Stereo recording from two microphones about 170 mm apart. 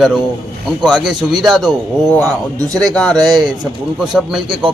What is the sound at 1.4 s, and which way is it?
A man's voice, centre (ahead or behind).